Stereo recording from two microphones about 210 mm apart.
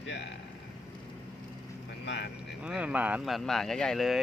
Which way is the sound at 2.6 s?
5° right (ahead or behind).